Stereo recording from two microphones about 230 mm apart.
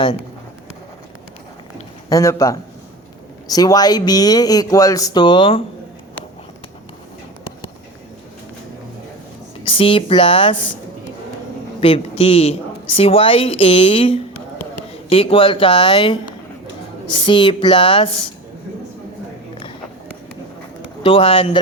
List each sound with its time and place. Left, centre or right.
2.0 s speech: centre
9.6 s speech: left
11.8 s speech: left
21.0 s speech: left